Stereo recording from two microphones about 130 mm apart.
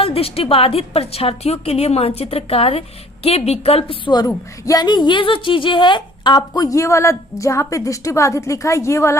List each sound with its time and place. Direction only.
0.0 s a woman's voice: 50° left (ahead or behind)
4.3 s a woman's voice: 25° left (ahead or behind)